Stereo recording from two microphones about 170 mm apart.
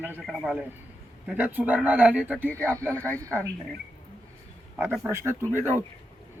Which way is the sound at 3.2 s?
15° right (ahead or behind).